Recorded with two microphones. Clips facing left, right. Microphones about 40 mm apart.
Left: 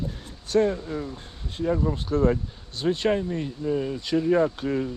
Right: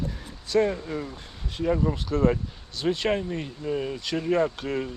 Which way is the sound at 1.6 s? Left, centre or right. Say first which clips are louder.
Even; right.